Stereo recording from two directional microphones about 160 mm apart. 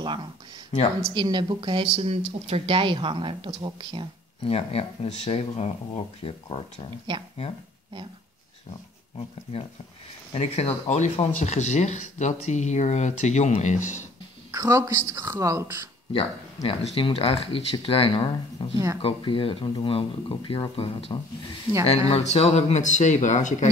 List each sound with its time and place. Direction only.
0.0 s a woman's voice: 30° right (ahead or behind)
4.5 s speech: 40° left (ahead or behind)
10.3 s speech: 40° left (ahead or behind)
14.5 s a woman's voice: 20° right (ahead or behind)
16.1 s speech: 35° left (ahead or behind)